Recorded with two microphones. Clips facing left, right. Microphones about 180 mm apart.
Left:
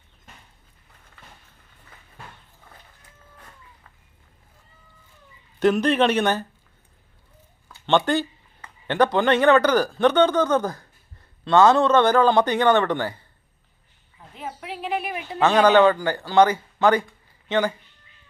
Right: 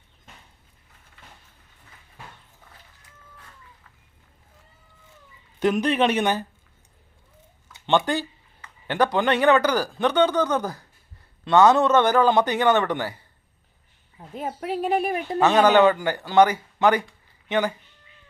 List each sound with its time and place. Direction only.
5.5 s speech: 10° right (ahead or behind)
7.7 s speech: 15° right (ahead or behind)
14.3 s a woman's voice: 40° right (ahead or behind)
15.4 s speech: 15° right (ahead or behind)